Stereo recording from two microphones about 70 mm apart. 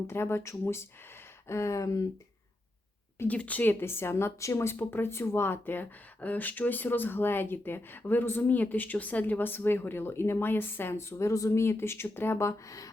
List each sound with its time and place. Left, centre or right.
0.1 s a woman's voice: left
1.5 s a sound: left
3.2 s a woman's voice: left